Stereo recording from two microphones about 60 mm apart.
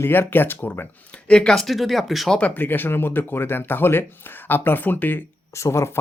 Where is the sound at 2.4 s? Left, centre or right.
Left.